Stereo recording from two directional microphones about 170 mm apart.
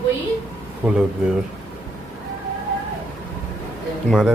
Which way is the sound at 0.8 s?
5° right (ahead or behind).